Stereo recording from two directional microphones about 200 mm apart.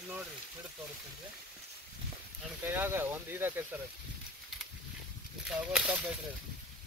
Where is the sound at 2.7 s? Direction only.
10° right (ahead or behind).